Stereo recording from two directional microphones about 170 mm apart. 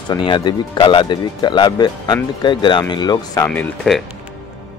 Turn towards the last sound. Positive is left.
turn(degrees=0)  # may be behind; listen again after turning